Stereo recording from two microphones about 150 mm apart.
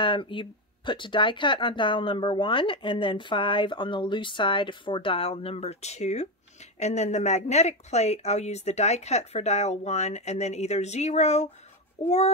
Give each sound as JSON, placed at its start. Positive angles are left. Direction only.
{"t": 0.0, "sound": "speech", "side_deg": 35}